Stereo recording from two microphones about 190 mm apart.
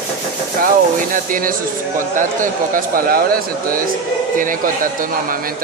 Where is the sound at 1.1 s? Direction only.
45° right (ahead or behind).